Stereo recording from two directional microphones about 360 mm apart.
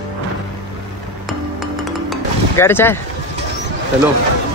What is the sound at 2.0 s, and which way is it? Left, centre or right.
Mechanisms, centre.